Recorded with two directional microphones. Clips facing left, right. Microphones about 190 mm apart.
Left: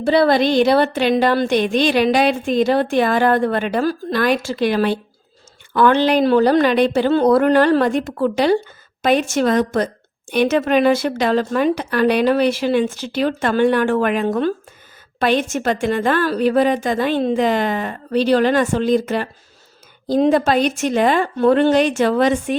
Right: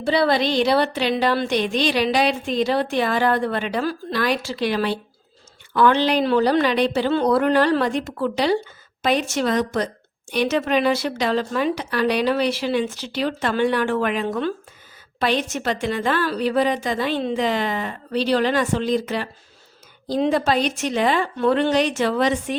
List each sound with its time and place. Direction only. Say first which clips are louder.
0.0 s speech: left 5 dB; 50° left (ahead or behind)